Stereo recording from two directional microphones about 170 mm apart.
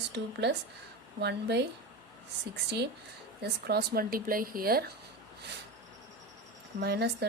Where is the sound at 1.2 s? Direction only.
80° right.